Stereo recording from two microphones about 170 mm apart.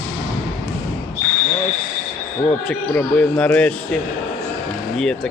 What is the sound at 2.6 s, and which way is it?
Speech, 5° left (ahead or behind).